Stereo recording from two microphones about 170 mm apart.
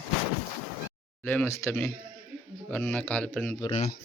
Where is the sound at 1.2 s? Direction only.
10° left (ahead or behind).